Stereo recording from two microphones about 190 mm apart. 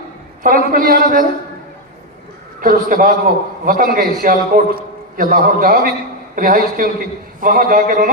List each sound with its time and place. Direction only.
0.4 s a man's voice: 45° right (ahead or behind)
2.6 s a man's voice: 45° right (ahead or behind)